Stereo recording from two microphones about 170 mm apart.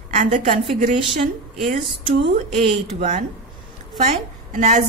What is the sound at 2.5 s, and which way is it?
A woman's voice, 40° right (ahead or behind).